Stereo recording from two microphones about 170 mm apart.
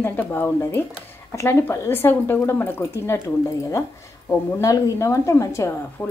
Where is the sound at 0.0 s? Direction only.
10° left (ahead or behind).